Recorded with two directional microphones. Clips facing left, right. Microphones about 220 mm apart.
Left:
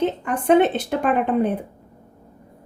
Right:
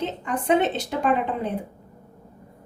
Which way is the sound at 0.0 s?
55° left (ahead or behind).